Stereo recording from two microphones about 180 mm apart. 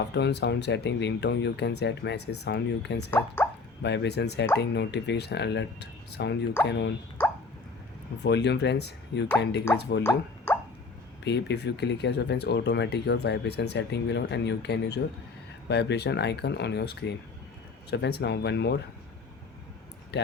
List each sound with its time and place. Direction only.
0.0 s speech: 70° left (ahead or behind)
3.1 s speech: 10° left (ahead or behind)
3.8 s speech: 70° left (ahead or behind)
7.2 s a sound: 10° left (ahead or behind)
8.2 s speech: 70° left (ahead or behind)
10.0 s speech: 10° left (ahead or behind)
11.2 s speech: 70° left (ahead or behind)
20.1 s speech: 70° left (ahead or behind)